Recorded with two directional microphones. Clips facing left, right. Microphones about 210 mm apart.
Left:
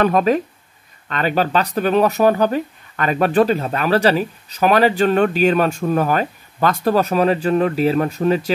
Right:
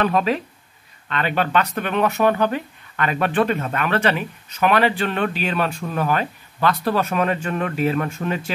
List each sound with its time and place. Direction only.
0.0 s speech: 45° left (ahead or behind)